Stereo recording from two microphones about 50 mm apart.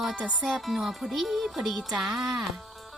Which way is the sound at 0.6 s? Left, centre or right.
Centre.